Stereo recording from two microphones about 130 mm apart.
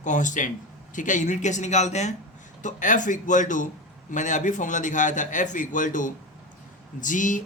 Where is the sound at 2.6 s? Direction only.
75° left (ahead or behind).